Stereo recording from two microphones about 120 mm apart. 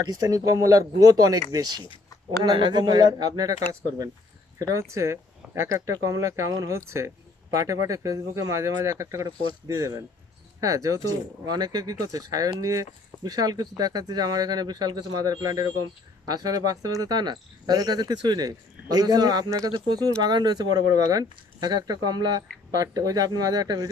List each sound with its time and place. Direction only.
0.1 s speech: 30° right (ahead or behind)
4.6 s speech: 25° right (ahead or behind)